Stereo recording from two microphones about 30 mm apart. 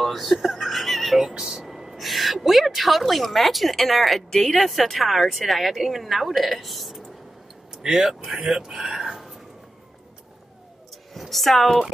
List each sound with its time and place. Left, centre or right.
0.0 s speech: centre
0.4 s speech: centre
0.7 s speech: centre
1.4 s speech: centre
1.7 s a woman's voice: centre
7.8 s speech: centre
9.1 s a sound: centre
11.1 s speech: centre